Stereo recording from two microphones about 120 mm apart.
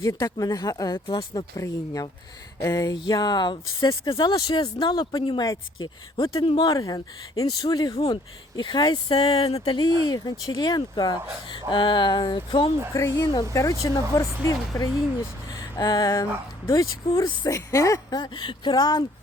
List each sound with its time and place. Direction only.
0.0 s speech: 25° left (ahead or behind)
9.3 s a sound: 55° left (ahead or behind)
9.6 s speech: 35° left (ahead or behind)
12.9 s speech: 25° left (ahead or behind)
15.5 s a sound: 30° left (ahead or behind)
16.6 s speech: 30° left (ahead or behind)